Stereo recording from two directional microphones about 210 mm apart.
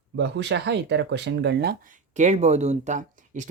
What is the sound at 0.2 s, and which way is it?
Speech, 55° right (ahead or behind).